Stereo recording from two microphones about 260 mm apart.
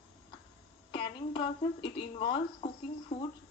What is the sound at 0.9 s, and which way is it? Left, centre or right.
Speech, centre.